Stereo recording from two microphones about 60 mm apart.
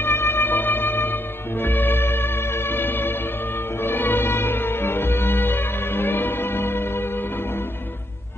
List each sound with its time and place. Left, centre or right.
0.0 s music: left